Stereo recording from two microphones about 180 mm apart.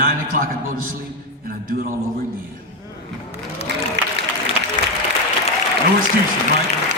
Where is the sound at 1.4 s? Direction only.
55° right (ahead or behind).